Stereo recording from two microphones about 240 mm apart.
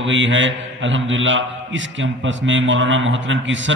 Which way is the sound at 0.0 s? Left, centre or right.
Right.